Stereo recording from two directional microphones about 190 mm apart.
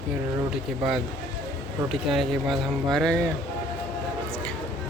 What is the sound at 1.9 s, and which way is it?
Speech, centre (ahead or behind).